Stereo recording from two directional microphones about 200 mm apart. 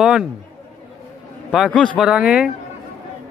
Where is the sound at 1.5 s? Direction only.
Centre (ahead or behind).